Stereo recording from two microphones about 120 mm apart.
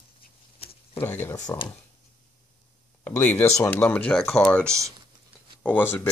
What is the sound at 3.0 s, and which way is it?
Speech, 15° left (ahead or behind).